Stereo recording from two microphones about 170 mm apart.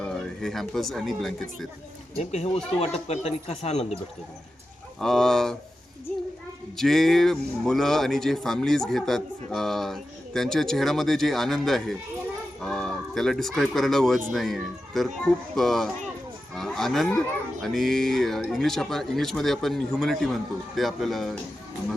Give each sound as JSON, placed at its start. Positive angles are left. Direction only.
{"t": 0.0, "sound": "speech", "side_deg": 0}
{"t": 2.1, "sound": "speech", "side_deg": 40}
{"t": 4.9, "sound": "speech", "side_deg": 5}
{"t": 6.7, "sound": "speech", "side_deg": 0}